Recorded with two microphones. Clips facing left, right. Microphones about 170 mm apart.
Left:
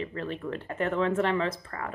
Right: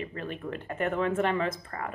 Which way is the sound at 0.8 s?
50° right (ahead or behind).